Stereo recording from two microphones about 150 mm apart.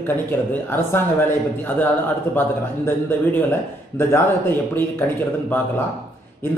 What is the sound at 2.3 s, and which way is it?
Speech, 15° left (ahead or behind).